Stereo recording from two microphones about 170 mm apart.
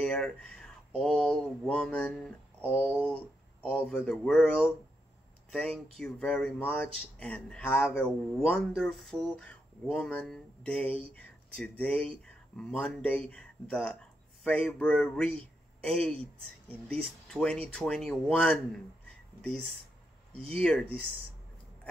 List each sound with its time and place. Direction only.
0.0 s speech: 5° left (ahead or behind)
20.4 s speech: 5° left (ahead or behind)